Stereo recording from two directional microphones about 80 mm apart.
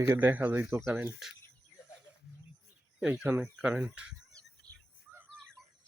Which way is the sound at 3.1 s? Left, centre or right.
Right.